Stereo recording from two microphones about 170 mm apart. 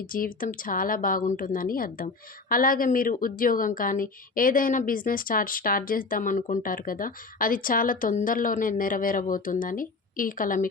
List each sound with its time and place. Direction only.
0.1 s a woman's voice: 55° left (ahead or behind)